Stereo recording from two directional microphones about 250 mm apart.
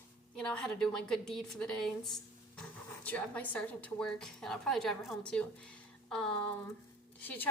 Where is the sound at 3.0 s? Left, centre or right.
Centre.